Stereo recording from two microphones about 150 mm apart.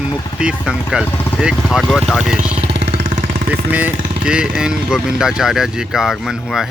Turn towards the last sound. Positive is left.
turn(degrees=0)  # may be behind; listen again after turning